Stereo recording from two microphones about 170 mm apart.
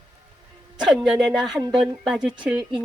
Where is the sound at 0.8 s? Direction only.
5° right (ahead or behind).